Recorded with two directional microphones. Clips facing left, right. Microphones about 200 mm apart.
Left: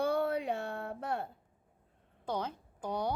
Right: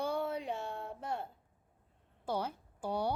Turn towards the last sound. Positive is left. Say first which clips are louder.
# even
turn(degrees=-10)  # may be behind; listen again after turning